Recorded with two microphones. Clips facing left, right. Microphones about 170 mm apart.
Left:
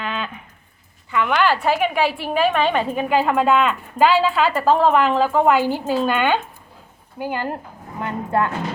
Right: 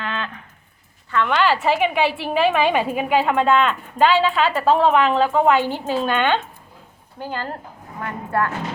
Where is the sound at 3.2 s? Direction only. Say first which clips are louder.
Even; centre (ahead or behind).